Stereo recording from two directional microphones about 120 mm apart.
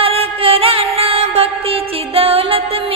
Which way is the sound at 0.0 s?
55° right (ahead or behind).